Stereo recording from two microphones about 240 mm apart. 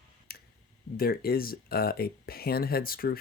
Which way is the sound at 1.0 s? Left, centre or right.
Left.